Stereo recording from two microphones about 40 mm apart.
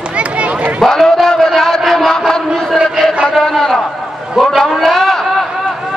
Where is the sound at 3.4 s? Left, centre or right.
Centre.